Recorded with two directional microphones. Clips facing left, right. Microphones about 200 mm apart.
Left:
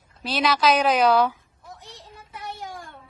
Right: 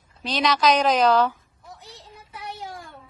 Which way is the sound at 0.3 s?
5° left (ahead or behind).